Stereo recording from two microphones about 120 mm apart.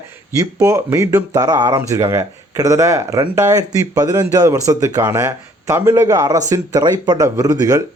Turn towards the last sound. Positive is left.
turn(degrees=-25)  # may be behind; listen again after turning